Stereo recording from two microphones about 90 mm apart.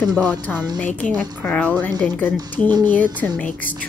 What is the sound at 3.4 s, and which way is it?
Speech, 20° left (ahead or behind).